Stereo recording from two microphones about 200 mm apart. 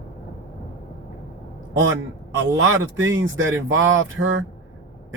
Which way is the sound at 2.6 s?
70° right (ahead or behind).